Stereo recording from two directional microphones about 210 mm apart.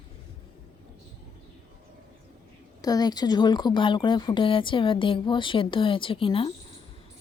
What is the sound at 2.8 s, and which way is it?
Speech, 20° left (ahead or behind).